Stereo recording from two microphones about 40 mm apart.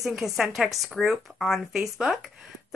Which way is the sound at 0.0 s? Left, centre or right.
Centre.